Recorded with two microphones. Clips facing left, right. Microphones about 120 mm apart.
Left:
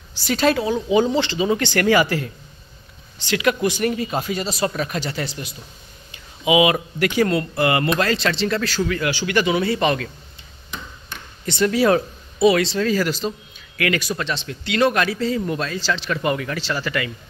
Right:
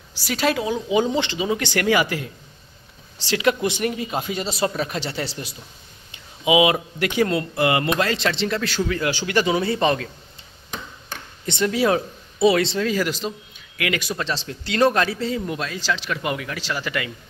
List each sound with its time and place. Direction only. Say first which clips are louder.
0.2 s a man's voice: left 3 dB; 10° right (ahead or behind)
3.2 s speech: left 1 dB; 30° right (ahead or behind)
9.1 s speech: left 1 dB; 35° right (ahead or behind)
11.4 s a man's voice: left 3 dB; 20° right (ahead or behind)
14.3 s a man's voice: left 2 dB; 35° right (ahead or behind); by 17.1 s 15° right (ahead or behind)